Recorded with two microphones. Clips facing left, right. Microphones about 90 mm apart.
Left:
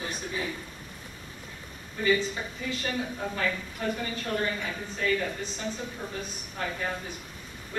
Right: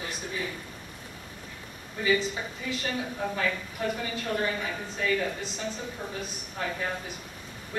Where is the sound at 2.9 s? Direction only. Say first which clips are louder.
Right 1 dB; centre (ahead or behind).